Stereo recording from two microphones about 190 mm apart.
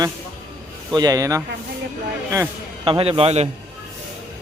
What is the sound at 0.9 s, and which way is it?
Speech, 20° right (ahead or behind).